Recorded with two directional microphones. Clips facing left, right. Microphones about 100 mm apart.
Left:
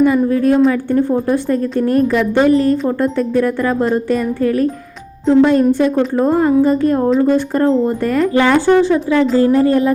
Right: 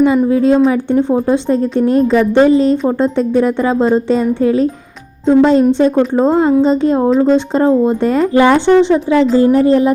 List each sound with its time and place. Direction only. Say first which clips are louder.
0.3 s a woman's voice: right 2 dB; 20° right (ahead or behind)